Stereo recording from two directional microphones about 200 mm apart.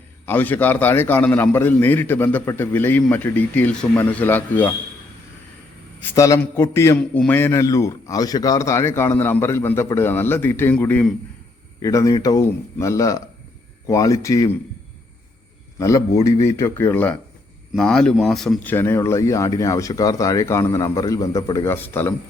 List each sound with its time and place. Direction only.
0.3 s a man's voice: 10° left (ahead or behind)
6.1 s a man's voice: 15° left (ahead or behind)
15.8 s a man's voice: 15° left (ahead or behind)